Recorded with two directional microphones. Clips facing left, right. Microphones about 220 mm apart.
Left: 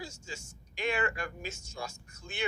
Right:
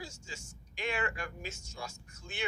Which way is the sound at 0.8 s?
45° left (ahead or behind).